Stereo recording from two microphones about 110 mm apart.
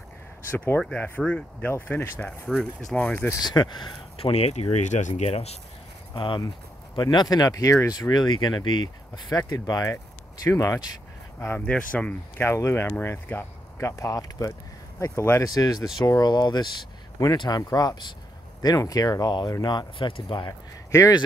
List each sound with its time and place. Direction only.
0.5 s speech: 15° left (ahead or behind)
3.3 s speech: 40° left (ahead or behind)
4.2 s speech: 70° left (ahead or behind)
6.1 s speech: 50° left (ahead or behind); by 10.8 s 25° left (ahead or behind)
11.3 s speech: 15° left (ahead or behind)
12.4 s speech: 25° left (ahead or behind); by 20.5 s 45° left (ahead or behind)